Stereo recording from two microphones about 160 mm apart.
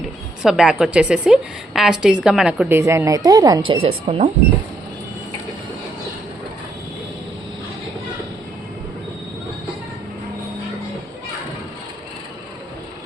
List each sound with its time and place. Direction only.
0.4 s a woman's voice: centre (ahead or behind); by 3.8 s 25° right (ahead or behind)
3.8 s speech: 40° right (ahead or behind)